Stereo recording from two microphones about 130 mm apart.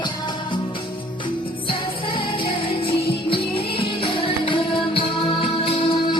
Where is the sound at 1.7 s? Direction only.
40° left (ahead or behind).